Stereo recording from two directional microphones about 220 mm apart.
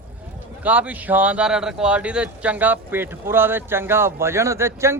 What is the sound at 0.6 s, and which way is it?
Speech, 5° right (ahead or behind).